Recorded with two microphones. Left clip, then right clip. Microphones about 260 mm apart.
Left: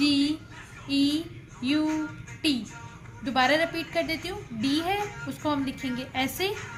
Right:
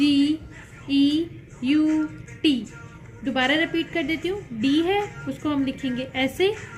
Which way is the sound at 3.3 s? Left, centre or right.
Left.